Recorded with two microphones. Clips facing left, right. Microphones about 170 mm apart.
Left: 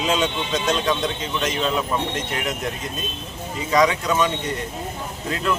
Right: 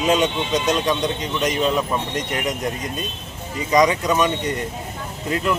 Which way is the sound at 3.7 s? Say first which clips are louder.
Right 2 dB; 15° right (ahead or behind).